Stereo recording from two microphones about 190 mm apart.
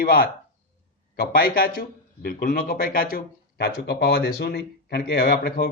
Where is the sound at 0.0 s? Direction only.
50° left (ahead or behind).